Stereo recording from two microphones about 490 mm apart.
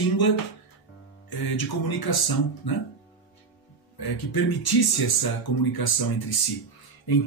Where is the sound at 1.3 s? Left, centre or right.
Left.